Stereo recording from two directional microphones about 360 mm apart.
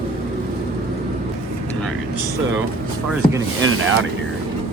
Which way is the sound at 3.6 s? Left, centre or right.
Right.